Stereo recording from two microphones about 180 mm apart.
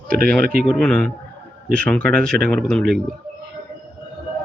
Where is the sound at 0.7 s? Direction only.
5° left (ahead or behind).